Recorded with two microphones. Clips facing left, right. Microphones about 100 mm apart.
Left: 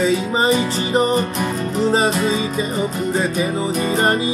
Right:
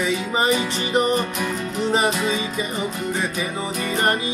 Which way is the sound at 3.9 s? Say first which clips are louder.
Left 3 dB; 30° left (ahead or behind).